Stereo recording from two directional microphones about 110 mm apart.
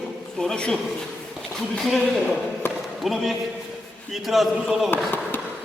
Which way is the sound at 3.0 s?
Centre (ahead or behind).